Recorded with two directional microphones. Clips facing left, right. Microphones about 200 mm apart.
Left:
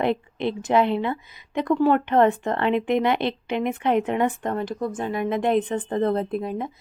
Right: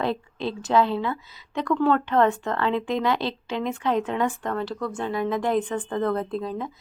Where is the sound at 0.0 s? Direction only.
20° left (ahead or behind).